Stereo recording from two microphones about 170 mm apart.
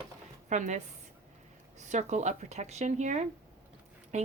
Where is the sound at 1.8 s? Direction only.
45° right (ahead or behind).